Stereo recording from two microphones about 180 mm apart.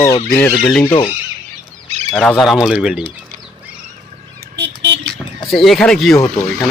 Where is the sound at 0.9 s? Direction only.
25° left (ahead or behind).